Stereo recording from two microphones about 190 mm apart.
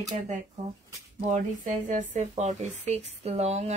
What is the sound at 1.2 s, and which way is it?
Speech, 40° right (ahead or behind).